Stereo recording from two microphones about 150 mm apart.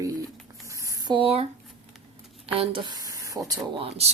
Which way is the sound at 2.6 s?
35° right (ahead or behind).